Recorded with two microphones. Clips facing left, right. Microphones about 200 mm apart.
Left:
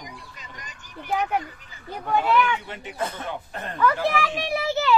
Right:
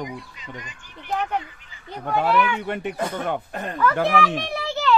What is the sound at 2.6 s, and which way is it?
Speech, 55° right (ahead or behind).